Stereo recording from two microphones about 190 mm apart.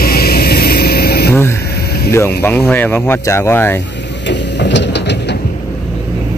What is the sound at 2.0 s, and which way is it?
Speech, 15° left (ahead or behind).